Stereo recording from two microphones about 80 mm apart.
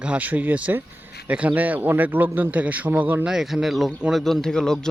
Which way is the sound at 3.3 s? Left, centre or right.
Centre.